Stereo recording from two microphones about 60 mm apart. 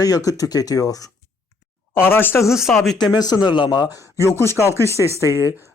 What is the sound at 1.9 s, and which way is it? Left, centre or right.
Speech, left.